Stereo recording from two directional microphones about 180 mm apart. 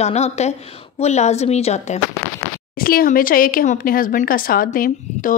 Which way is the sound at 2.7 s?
55° left (ahead or behind).